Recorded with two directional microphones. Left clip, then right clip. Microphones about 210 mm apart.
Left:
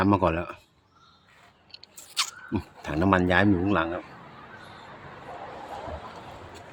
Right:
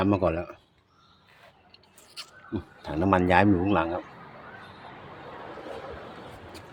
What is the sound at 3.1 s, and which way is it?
Speech, centre (ahead or behind).